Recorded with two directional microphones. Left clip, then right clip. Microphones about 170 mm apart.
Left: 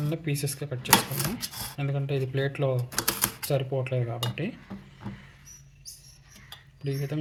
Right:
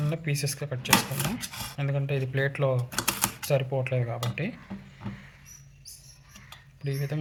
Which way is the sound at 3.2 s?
15° left (ahead or behind).